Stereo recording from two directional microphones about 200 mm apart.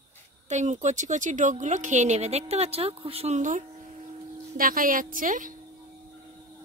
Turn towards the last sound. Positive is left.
turn(degrees=-40)  # may be behind; listen again after turning